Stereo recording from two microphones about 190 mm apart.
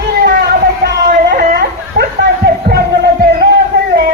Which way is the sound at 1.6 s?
60° right (ahead or behind).